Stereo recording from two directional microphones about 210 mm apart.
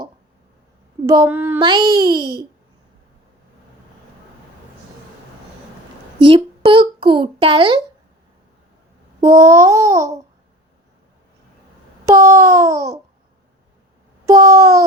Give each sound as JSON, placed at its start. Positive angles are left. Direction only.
{"t": 1.0, "sound": "speech", "side_deg": -15}
{"t": 1.6, "sound": "babbling", "side_deg": -20}
{"t": 6.1, "sound": "a child's voice", "side_deg": -25}
{"t": 9.2, "sound": "babbling", "side_deg": -15}
{"t": 12.0, "sound": "babbling", "side_deg": -15}
{"t": 14.3, "sound": "babbling", "side_deg": -15}